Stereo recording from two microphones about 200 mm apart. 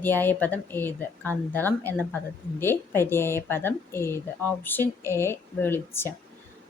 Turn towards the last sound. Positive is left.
turn(degrees=10)  # may be behind; listen again after turning